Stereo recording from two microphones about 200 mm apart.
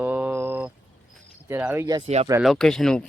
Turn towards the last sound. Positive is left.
turn(degrees=5)  # may be behind; listen again after turning